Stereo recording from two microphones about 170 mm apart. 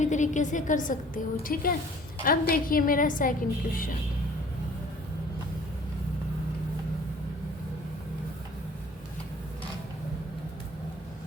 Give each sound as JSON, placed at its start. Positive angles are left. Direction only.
{"t": 0.0, "sound": "a woman's voice", "side_deg": 45}